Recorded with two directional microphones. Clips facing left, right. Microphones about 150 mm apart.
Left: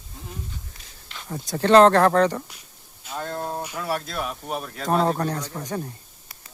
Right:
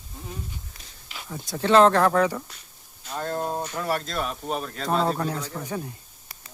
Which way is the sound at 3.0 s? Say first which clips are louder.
Right 1 dB; centre (ahead or behind).